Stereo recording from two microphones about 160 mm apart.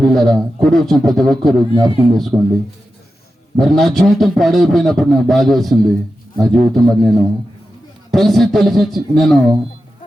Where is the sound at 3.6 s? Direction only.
Centre (ahead or behind).